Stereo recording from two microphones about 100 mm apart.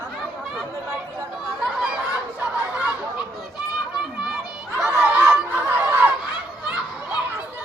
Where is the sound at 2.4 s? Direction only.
15° right (ahead or behind).